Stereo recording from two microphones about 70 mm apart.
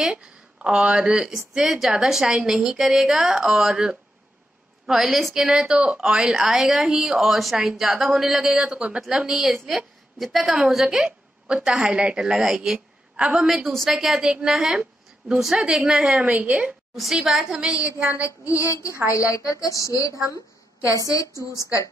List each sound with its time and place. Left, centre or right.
0.0 s a woman's voice: centre
13.5 s a woman's voice: centre
14.8 s a sound: centre
15.4 s a woman's voice: centre
16.9 s a woman's voice: centre
17.9 s a sound: right
18.2 s a woman's voice: left